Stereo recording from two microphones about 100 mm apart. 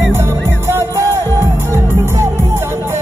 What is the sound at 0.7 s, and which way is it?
Music, 30° right (ahead or behind).